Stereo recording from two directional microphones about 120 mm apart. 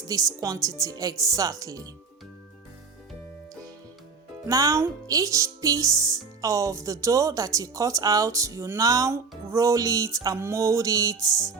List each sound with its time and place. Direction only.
0.1 s a woman's voice: 30° right (ahead or behind)
4.4 s a woman's voice: 30° right (ahead or behind)